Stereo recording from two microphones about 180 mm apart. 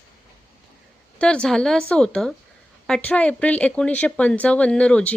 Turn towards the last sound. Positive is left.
turn(degrees=5)  # may be behind; listen again after turning